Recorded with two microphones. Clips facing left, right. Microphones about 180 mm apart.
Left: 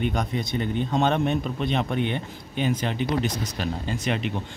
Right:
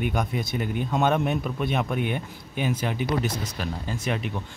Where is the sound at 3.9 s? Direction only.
85° left.